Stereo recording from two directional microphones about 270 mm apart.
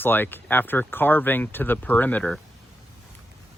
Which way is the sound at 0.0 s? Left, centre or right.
Centre.